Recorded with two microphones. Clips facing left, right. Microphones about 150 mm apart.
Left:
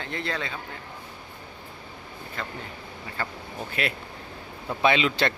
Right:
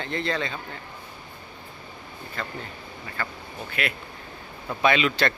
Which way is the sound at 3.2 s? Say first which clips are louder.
Left 1 dB; 30° left (ahead or behind).